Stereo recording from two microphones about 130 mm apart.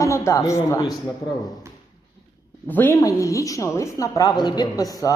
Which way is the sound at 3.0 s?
25° left (ahead or behind).